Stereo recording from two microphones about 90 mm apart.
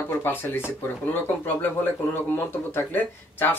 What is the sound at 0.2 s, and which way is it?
Speech, 25° left (ahead or behind).